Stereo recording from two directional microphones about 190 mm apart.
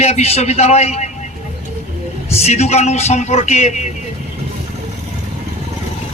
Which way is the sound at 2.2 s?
35° left (ahead or behind).